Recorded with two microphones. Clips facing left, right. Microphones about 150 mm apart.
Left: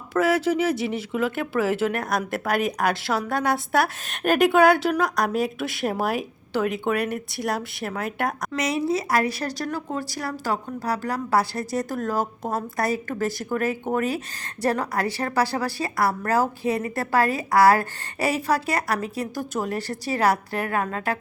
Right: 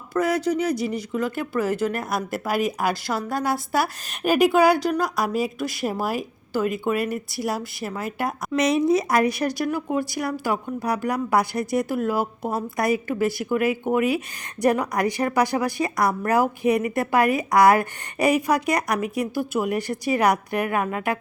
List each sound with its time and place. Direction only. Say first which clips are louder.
0.1 s speech: left 1 dB; 5° left (ahead or behind)
8.5 s a woman's voice: right 6 dB; 20° right (ahead or behind)